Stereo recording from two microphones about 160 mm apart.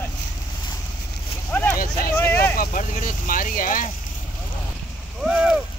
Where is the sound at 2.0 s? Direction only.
15° left (ahead or behind).